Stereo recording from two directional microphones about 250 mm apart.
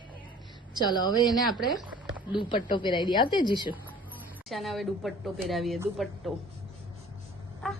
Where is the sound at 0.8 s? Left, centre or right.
Centre.